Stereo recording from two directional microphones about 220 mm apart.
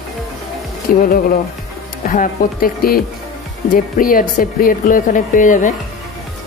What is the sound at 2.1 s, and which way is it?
Speech, 40° left (ahead or behind).